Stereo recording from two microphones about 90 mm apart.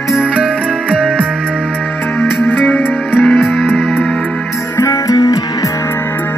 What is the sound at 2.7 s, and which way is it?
Music, 20° left (ahead or behind).